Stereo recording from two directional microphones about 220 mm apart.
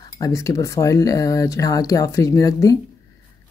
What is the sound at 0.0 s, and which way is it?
Speech, 15° left (ahead or behind).